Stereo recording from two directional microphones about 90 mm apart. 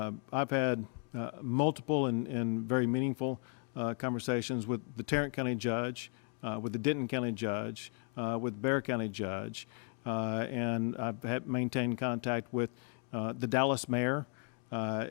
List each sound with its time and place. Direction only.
0.0 s speech: 30° right (ahead or behind)